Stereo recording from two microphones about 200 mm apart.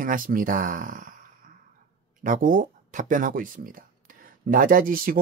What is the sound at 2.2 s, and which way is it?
Speech, 40° right (ahead or behind).